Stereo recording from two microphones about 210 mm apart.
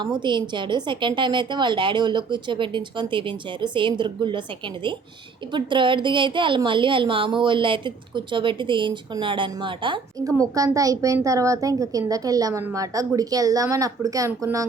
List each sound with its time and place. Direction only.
0.2 s a woman's voice: 20° right (ahead or behind)